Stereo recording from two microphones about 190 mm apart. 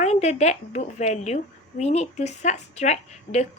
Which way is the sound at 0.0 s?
35° left (ahead or behind).